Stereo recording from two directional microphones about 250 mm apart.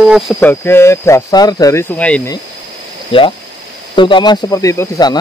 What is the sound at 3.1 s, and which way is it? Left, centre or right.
Speech, left.